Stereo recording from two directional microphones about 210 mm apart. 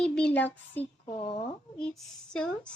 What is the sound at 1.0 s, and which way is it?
Speech, 25° left (ahead or behind).